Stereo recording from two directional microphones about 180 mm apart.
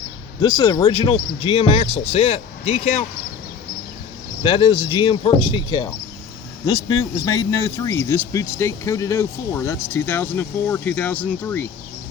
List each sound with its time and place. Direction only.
0.4 s speech: 20° left (ahead or behind)
4.4 s speech: 25° left (ahead or behind); by 11.7 s 10° left (ahead or behind)